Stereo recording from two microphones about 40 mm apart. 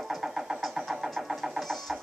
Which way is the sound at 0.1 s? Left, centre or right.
Centre.